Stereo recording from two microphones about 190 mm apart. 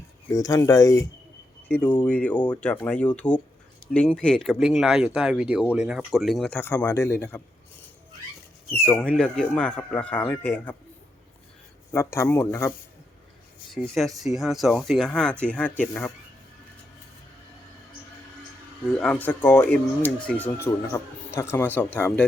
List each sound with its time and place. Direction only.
0.3 s speech: 20° left (ahead or behind)
8.7 s speech: 5° left (ahead or behind)
11.9 s speech: 15° left (ahead or behind)
13.8 s speech: centre (ahead or behind)
18.9 s speech: 5° left (ahead or behind)